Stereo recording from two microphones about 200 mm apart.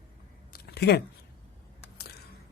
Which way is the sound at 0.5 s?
55° left (ahead or behind).